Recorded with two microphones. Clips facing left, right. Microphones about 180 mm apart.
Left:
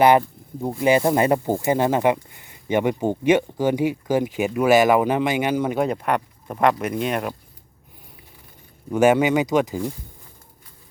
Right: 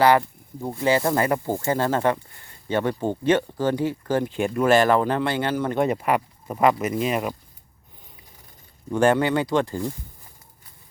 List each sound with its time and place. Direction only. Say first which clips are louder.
0.0 s speech: left 2 dB; 20° left (ahead or behind)
5.8 s speech: even; 5° right (ahead or behind)
8.9 s speech: left 3 dB; 10° left (ahead or behind)